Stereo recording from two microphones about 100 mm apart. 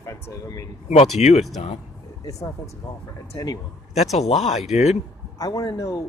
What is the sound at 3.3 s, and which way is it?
Speech, 40° left (ahead or behind).